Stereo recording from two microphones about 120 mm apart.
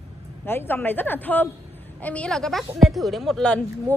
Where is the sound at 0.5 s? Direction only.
15° left (ahead or behind).